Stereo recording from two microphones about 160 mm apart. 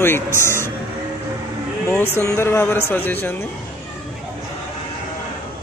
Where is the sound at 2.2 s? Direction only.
15° left (ahead or behind).